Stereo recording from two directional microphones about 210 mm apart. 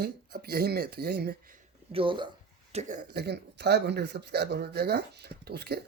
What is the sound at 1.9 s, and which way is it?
Speech, 25° right (ahead or behind).